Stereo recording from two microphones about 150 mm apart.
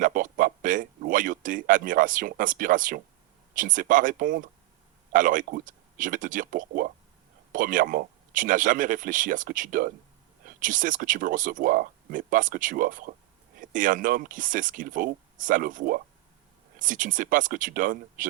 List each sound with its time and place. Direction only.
0.0 s speech: 65° right (ahead or behind)